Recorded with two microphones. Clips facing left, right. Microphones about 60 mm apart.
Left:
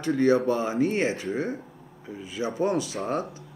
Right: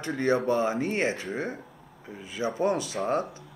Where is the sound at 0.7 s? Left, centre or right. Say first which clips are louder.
Left 3 dB; right.